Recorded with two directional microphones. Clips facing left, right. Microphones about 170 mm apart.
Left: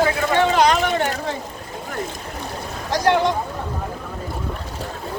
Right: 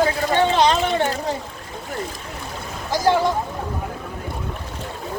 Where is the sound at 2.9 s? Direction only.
5° right (ahead or behind).